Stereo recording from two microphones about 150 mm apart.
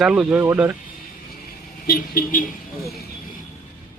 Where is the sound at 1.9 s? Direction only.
75° left (ahead or behind).